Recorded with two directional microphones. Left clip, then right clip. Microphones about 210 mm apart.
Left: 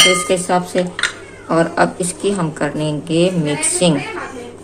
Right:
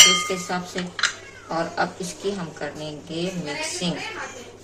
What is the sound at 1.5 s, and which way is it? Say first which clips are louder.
Speech: left 10 dB; 55° left (ahead or behind).